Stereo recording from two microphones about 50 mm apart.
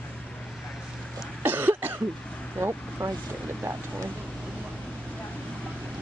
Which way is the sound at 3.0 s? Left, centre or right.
Right.